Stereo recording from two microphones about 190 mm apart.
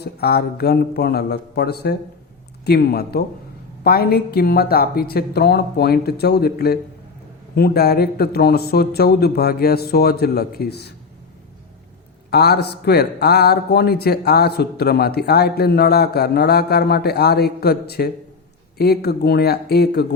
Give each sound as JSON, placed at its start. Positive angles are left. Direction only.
{"t": 0.0, "sound": "a man's voice", "side_deg": 55}
{"t": 12.3, "sound": "a man's voice", "side_deg": 55}